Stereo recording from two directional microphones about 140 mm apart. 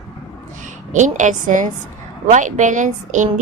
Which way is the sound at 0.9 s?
60° right (ahead or behind).